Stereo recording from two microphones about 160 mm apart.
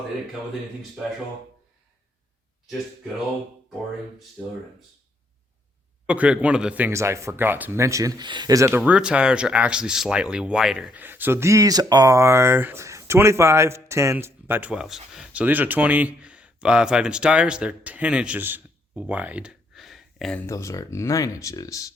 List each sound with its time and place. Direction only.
6.1 s speech: 5° right (ahead or behind)
8.8 s speech: 5° right (ahead or behind)
20.5 s speech: 20° left (ahead or behind)